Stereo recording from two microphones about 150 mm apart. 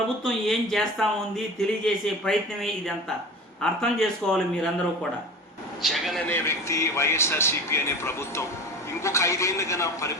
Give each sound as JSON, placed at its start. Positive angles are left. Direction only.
{"t": 0.3, "sound": "speech", "side_deg": 5}
{"t": 5.8, "sound": "speech", "side_deg": 0}
{"t": 6.2, "sound": "a man's voice", "side_deg": 15}